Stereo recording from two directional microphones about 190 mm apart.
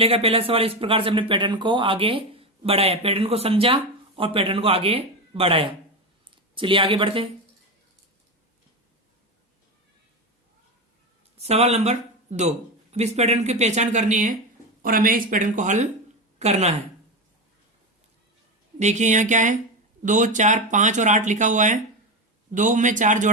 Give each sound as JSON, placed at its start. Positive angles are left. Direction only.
{"t": 0.0, "sound": "speech", "side_deg": -30}
{"t": 11.3, "sound": "speech", "side_deg": -35}
{"t": 18.8, "sound": "speech", "side_deg": -40}